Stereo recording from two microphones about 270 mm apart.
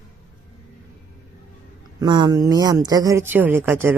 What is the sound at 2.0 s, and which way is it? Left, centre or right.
Speech, centre.